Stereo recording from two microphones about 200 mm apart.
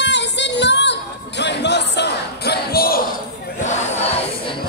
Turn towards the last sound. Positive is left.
turn(degrees=30)  # may be behind; listen again after turning